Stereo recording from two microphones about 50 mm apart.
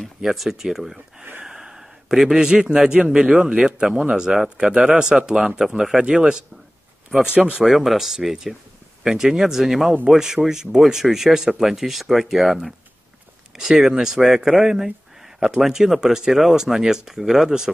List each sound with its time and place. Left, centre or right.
0.2 s a man's voice: centre
7.6 s speech: centre